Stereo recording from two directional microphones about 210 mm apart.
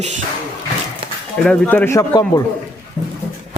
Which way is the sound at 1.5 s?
10° left (ahead or behind).